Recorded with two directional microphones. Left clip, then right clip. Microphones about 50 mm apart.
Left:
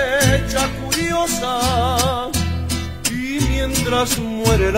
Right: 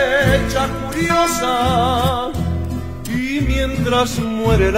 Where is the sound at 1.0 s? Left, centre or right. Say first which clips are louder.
Right 5 dB; left.